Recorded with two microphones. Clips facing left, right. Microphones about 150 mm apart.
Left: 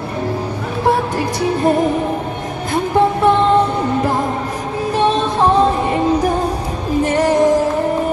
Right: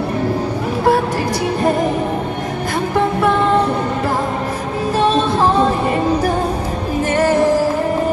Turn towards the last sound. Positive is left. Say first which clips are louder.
# left 1 dB
turn(degrees=20)  # may be behind; listen again after turning